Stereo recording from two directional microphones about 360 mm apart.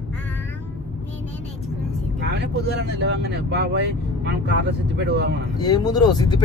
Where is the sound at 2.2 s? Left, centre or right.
Right.